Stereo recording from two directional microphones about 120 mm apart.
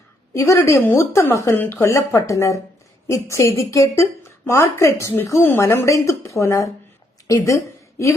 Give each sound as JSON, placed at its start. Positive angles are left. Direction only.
{"t": 0.3, "sound": "a woman's voice", "side_deg": 25}